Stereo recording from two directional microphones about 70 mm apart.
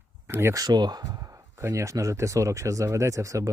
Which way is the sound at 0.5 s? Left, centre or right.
Right.